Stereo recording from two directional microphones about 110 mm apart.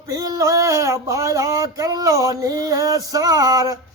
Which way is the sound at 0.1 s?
30° right (ahead or behind).